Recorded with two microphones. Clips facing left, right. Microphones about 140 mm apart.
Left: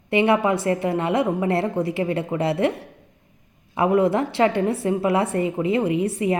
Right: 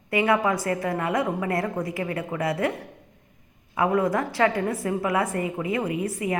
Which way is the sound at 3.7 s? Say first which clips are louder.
Left 4 dB; 25° left (ahead or behind).